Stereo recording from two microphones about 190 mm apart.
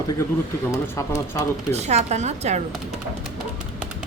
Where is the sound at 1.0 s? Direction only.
15° left (ahead or behind).